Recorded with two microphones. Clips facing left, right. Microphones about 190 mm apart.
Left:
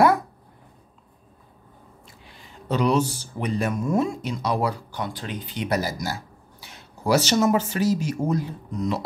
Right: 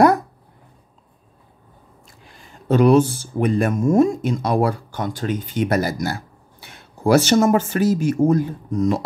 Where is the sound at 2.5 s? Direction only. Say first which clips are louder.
Right 8 dB; 50° right (ahead or behind).